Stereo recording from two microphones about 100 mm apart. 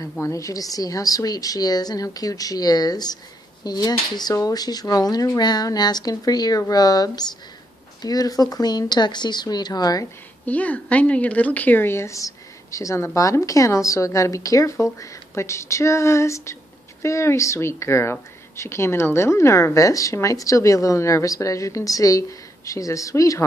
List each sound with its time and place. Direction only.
0.2 s a woman's voice: 30° left (ahead or behind)
10.4 s a woman's voice: 15° left (ahead or behind); by 23.4 s 35° left (ahead or behind)